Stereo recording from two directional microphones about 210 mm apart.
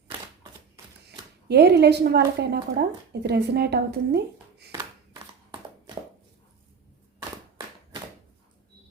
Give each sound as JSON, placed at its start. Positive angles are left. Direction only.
{"t": 1.5, "sound": "a woman's voice", "side_deg": -50}